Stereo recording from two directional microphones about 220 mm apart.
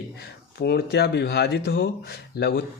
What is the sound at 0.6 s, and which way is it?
Speech, 45° left (ahead or behind).